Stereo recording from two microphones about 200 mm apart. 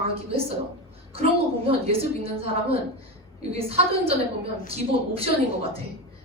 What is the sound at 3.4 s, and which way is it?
Speech, 30° right (ahead or behind).